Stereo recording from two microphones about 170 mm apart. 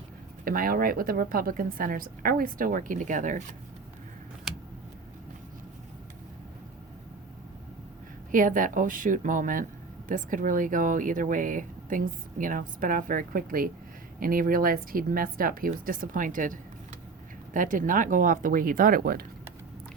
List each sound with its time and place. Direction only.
0.4 s a woman's voice: 55° right (ahead or behind)
8.3 s a woman's voice: 50° right (ahead or behind)